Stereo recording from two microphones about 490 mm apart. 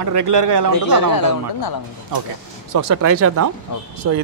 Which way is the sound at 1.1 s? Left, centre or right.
Left.